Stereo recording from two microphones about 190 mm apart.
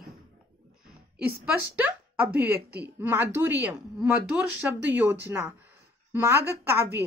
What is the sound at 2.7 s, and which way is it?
Speech, 60° right (ahead or behind).